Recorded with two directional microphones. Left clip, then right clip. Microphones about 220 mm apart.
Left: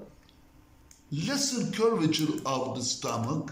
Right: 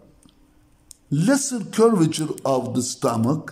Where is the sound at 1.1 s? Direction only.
60° right (ahead or behind).